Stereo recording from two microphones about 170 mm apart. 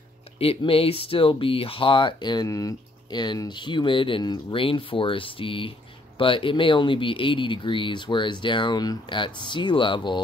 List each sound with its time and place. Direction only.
0.4 s speech: 35° left (ahead or behind)